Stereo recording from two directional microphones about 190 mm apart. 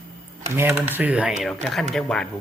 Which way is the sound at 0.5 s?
10° right (ahead or behind).